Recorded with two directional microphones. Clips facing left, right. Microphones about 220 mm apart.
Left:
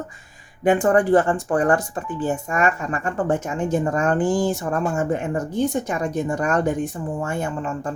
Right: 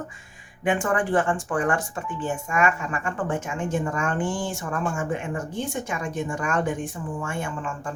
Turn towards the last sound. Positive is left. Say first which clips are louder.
# left 5 dB
turn(degrees=40)  # may be behind; listen again after turning